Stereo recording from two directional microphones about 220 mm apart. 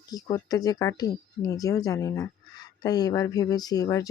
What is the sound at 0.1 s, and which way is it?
Speech, 15° left (ahead or behind).